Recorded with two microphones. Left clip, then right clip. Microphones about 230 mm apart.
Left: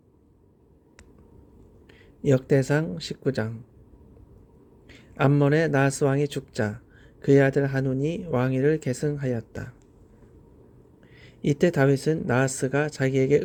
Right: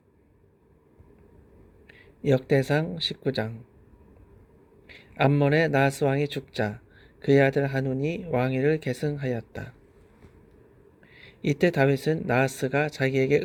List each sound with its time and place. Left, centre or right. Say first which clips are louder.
1.9 s speech: left 1 dB; centre
4.9 s a man's voice: even; centre
11.1 s a man's voice: left 2 dB; centre